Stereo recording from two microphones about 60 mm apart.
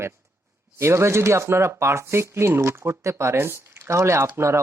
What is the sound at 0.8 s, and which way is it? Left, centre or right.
Speech, right.